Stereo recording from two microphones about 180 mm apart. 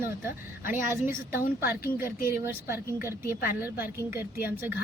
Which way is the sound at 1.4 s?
55° left (ahead or behind).